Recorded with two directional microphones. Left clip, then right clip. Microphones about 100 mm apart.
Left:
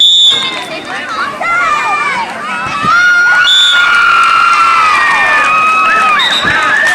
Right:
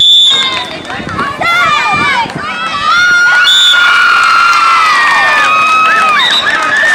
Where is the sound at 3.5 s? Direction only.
30° right (ahead or behind).